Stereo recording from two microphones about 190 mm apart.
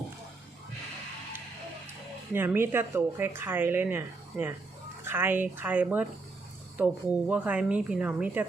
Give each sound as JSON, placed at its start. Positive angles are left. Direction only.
{"t": 2.3, "sound": "speech", "side_deg": -10}